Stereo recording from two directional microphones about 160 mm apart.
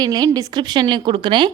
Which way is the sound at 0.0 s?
25° right (ahead or behind).